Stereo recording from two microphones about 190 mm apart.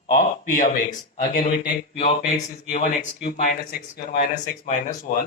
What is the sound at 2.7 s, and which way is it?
A man's voice, 50° left (ahead or behind).